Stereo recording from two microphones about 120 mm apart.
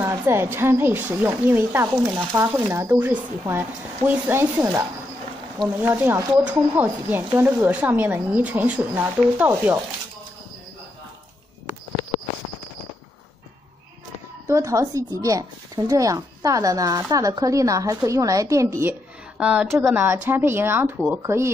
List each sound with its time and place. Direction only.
0.0 s speech: 20° right (ahead or behind)
14.5 s speech: 25° right (ahead or behind)
19.3 s a woman's voice: 10° right (ahead or behind)